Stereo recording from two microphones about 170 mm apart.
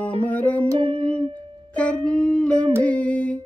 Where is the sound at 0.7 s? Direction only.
30° right (ahead or behind).